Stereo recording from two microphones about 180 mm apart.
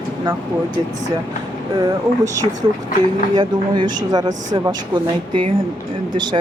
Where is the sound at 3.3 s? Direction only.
25° right (ahead or behind).